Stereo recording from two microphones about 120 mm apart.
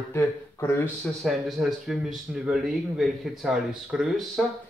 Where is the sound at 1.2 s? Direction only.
Centre (ahead or behind).